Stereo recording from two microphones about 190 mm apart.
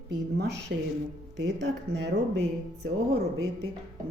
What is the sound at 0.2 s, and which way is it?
Speech, 60° right (ahead or behind).